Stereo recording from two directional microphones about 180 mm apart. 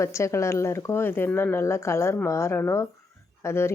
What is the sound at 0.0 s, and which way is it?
Speech, 15° left (ahead or behind).